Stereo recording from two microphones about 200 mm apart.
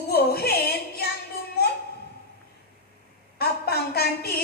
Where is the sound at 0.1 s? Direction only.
50° left (ahead or behind).